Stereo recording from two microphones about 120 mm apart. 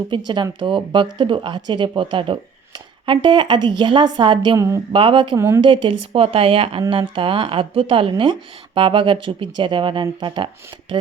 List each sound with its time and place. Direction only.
0.1 s speech: 40° right (ahead or behind)
4.5 s speech: 25° right (ahead or behind)
4.9 s speech: 45° right (ahead or behind)